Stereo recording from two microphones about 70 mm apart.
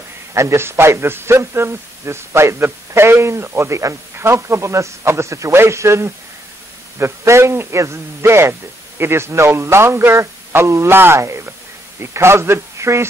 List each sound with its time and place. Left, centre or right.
0.3 s a man's voice: right